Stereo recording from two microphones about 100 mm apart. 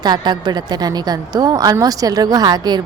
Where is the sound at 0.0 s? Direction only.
45° right (ahead or behind).